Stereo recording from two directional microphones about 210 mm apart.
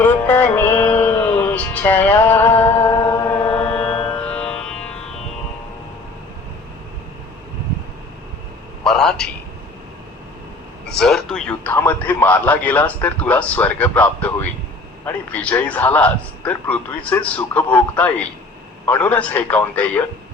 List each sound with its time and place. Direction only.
0.0 s music: 10° left (ahead or behind)
8.8 s a sound: centre (ahead or behind)
10.8 s a man's voice: centre (ahead or behind)